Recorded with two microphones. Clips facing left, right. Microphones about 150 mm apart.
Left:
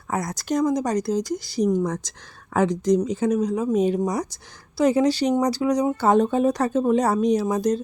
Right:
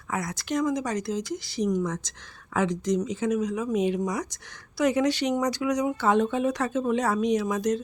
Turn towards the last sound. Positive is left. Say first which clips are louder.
# left 4 dB
turn(degrees=35)  # may be behind; listen again after turning